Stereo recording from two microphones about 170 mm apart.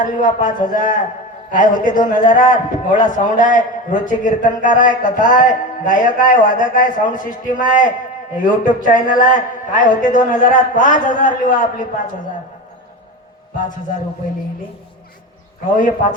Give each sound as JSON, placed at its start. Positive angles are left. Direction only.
{"t": 0.0, "sound": "a man's voice", "side_deg": 50}